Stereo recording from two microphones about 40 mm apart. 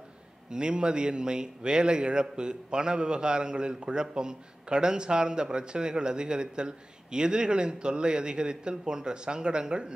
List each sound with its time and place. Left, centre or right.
0.5 s a man's voice: right